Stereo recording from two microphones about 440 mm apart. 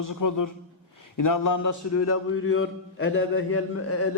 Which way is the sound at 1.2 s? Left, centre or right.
Left.